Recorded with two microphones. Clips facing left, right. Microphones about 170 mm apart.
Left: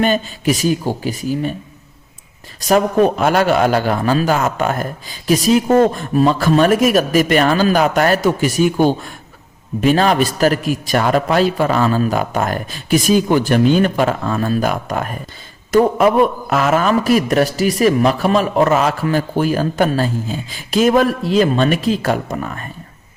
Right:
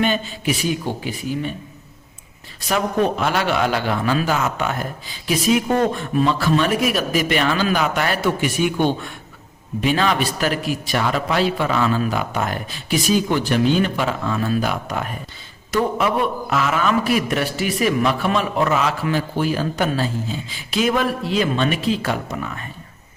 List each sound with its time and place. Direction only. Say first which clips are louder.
0.0 s speech: left 4 dB; 40° left (ahead or behind)
2.6 s a man's voice: left 7 dB; 45° left (ahead or behind)